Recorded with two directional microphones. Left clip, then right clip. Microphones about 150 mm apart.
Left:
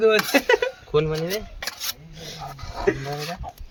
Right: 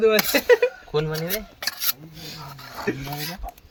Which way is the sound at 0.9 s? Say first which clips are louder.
Left 3 dB; 35° left (ahead or behind).